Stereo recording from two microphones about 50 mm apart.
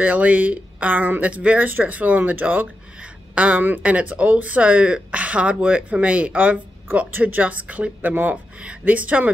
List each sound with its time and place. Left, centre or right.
0.0 s speech: right
3.0 s a sound: right
3.8 s speech: right
8.1 s speech: right
8.5 s speech: right